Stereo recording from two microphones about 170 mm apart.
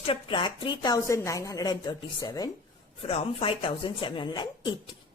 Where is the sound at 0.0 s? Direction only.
30° left (ahead or behind).